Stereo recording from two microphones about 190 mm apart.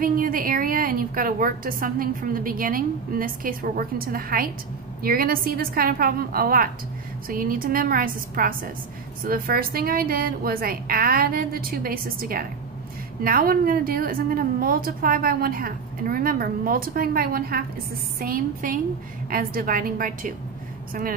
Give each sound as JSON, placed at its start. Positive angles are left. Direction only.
{"t": 0.0, "sound": "a woman's voice", "side_deg": -50}